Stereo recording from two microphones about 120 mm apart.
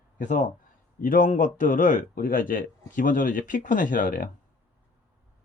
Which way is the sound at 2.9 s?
90° left.